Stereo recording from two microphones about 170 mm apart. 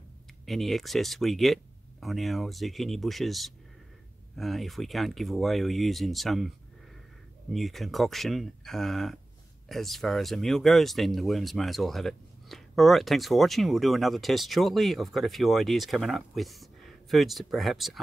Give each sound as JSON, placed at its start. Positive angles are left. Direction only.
{"t": 0.5, "sound": "speech", "side_deg": 0}
{"t": 7.5, "sound": "speech", "side_deg": 0}